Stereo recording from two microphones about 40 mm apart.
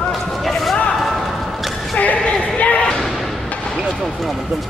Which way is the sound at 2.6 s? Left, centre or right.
Left.